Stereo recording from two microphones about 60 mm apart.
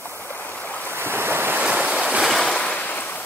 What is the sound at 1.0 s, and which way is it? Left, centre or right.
Waves, right.